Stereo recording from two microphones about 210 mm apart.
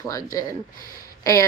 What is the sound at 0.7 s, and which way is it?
Speech, 40° left (ahead or behind).